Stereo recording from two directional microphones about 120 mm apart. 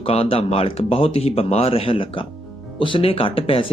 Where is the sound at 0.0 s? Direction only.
55° left (ahead or behind).